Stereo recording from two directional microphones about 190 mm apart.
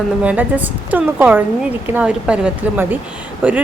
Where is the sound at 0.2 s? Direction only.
5° right (ahead or behind).